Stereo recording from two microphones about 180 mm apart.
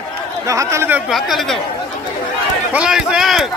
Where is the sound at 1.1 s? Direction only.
Centre (ahead or behind).